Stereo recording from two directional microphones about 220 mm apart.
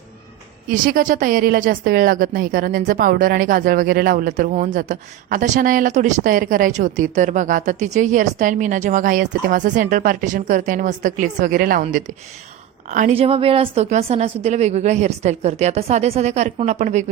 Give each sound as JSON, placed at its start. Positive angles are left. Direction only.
{"t": 0.7, "sound": "a woman's voice", "side_deg": -40}